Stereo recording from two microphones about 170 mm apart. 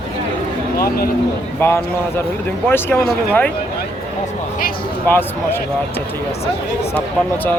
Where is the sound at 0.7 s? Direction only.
60° left (ahead or behind).